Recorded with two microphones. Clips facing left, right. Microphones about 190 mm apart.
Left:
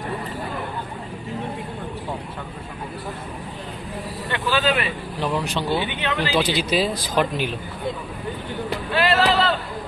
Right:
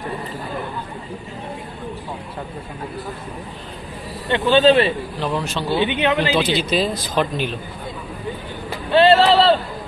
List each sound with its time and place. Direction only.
4.3 s speech: 25° right (ahead or behind)
5.2 s speech: 10° left (ahead or behind)
5.8 s speech: 20° right (ahead or behind)
6.3 s speech: 10° left (ahead or behind)
8.9 s vehicle: 30° right (ahead or behind)